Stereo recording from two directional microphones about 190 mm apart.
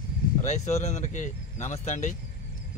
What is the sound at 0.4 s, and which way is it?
Speech, 40° left (ahead or behind).